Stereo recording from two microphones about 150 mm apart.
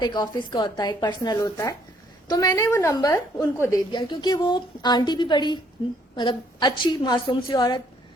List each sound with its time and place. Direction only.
0.0 s a woman's voice: 30° left (ahead or behind)